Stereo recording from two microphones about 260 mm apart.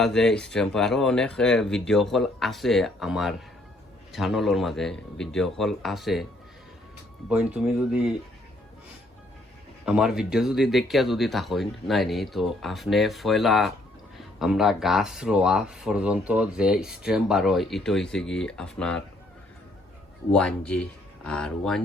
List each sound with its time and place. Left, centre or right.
0.0 s speech: centre
7.3 s speech: centre
9.8 s speech: centre
20.3 s speech: centre